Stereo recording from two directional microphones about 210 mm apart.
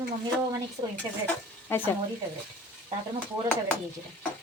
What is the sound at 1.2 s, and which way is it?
Speech, 10° left (ahead or behind).